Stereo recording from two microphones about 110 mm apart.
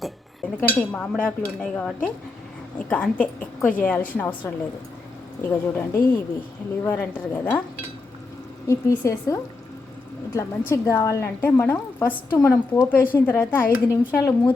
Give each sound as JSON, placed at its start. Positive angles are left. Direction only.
{"t": 0.4, "sound": "a woman's voice", "side_deg": 10}
{"t": 8.6, "sound": "a woman's voice", "side_deg": 25}
{"t": 10.7, "sound": "a woman's voice", "side_deg": 30}